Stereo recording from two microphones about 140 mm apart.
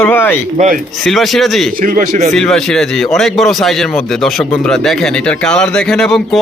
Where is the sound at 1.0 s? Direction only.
Centre (ahead or behind).